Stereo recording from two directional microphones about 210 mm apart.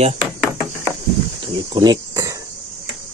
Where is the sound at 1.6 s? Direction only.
20° right (ahead or behind).